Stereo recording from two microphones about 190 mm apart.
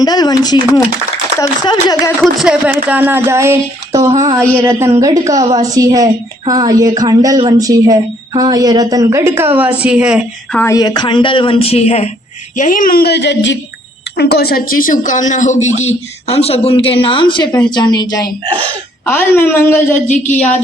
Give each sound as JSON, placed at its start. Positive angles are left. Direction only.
{"t": 0.0, "sound": "a woman's voice", "side_deg": 20}
{"t": 2.2, "sound": "speech", "side_deg": -5}
{"t": 4.4, "sound": "a woman's voice", "side_deg": 10}
{"t": 4.6, "sound": "a woman's voice", "side_deg": -15}
{"t": 10.5, "sound": "a woman's voice", "side_deg": 10}
{"t": 14.2, "sound": "a woman's voice", "side_deg": 55}